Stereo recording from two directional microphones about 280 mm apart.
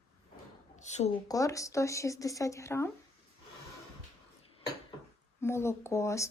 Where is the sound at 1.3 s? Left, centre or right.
Centre.